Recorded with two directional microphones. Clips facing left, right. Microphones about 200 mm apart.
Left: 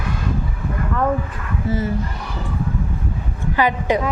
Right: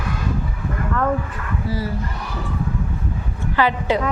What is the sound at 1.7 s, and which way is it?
Speech, 20° left (ahead or behind).